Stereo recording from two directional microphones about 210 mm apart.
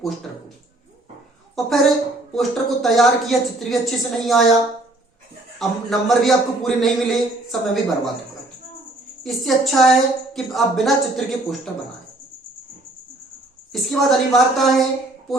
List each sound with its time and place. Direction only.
1.5 s a woman's voice: centre (ahead or behind)
5.5 s a man's voice: centre (ahead or behind)
9.2 s a man's voice: centre (ahead or behind)
13.9 s a man's voice: centre (ahead or behind)